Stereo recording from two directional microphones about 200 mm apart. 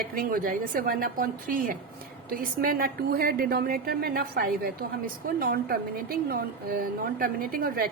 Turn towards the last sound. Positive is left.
turn(degrees=-45)  # may be behind; listen again after turning